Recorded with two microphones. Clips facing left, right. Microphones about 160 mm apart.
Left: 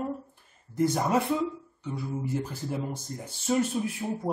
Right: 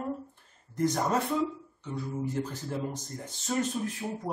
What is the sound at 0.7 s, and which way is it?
Speech, 10° left (ahead or behind).